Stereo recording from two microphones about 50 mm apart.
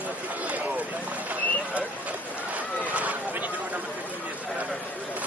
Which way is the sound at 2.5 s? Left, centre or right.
Right.